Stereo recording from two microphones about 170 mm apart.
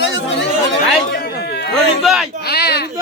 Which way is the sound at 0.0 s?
90° left.